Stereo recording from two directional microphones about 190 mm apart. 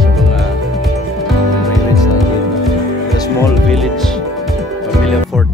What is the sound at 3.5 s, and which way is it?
Music, centre (ahead or behind).